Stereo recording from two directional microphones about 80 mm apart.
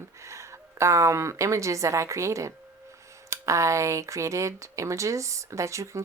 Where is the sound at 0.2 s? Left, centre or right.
Right.